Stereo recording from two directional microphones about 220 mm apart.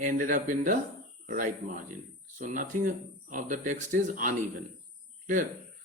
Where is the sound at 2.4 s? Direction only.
35° right (ahead or behind).